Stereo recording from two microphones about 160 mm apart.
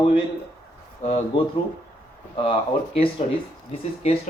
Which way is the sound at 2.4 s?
35° left (ahead or behind).